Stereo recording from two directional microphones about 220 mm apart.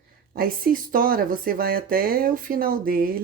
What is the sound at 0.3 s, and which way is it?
Speech, 40° right (ahead or behind).